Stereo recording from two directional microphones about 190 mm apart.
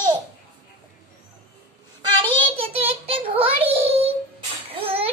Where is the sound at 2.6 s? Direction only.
30° right (ahead or behind).